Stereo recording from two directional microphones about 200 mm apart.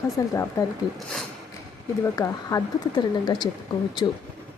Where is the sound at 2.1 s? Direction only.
15° left (ahead or behind).